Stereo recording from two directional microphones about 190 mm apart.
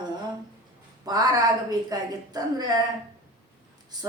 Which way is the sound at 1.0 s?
20° right (ahead or behind).